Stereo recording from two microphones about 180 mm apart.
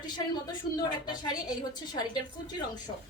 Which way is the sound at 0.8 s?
20° left (ahead or behind).